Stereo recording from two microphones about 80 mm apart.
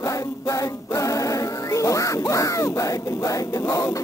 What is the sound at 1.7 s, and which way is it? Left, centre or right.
Music, left.